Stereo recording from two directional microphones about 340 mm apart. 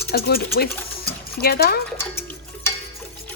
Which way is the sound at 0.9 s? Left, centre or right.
Left.